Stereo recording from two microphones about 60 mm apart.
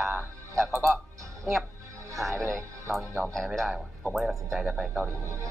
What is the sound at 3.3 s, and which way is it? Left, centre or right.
Speech, centre.